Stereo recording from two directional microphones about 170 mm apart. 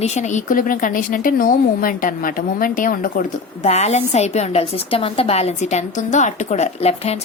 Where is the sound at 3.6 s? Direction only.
40° left (ahead or behind).